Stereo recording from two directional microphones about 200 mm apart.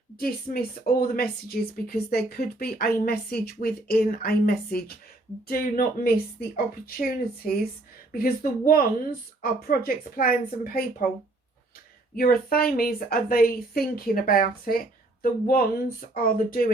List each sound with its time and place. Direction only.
0.2 s speech: 45° left (ahead or behind)
12.1 s speech: 45° left (ahead or behind)